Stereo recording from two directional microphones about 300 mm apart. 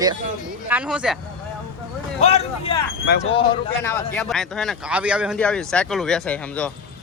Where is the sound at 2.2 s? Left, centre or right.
Left.